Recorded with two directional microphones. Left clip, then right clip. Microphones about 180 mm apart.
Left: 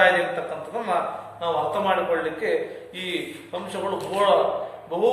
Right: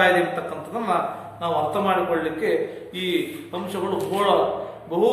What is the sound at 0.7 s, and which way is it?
A man's voice, 30° right (ahead or behind).